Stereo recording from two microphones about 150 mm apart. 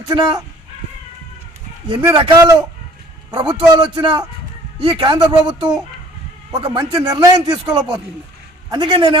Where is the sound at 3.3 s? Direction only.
30° right (ahead or behind).